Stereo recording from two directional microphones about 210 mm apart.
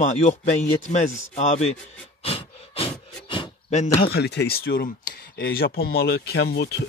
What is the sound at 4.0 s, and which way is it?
Speech, 50° left (ahead or behind).